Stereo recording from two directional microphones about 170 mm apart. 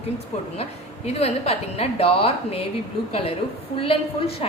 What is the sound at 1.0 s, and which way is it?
A woman's voice, 40° left (ahead or behind).